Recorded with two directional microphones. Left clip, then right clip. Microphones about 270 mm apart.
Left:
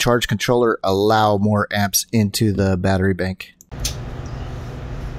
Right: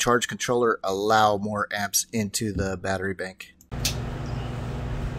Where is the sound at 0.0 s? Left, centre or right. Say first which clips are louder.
Left 5 dB; centre.